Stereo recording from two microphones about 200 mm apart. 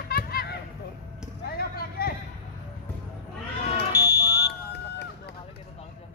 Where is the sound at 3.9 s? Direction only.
20° left (ahead or behind).